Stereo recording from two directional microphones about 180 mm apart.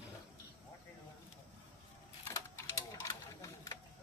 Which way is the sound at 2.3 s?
15° left (ahead or behind).